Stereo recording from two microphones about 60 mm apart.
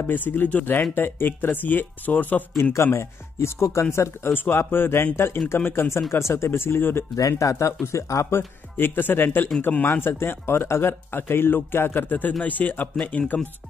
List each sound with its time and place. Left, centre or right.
0.0 s speech: left
2.7 s speech: left
6.1 s speech: left
7.2 s speech: left
8.4 s speech: left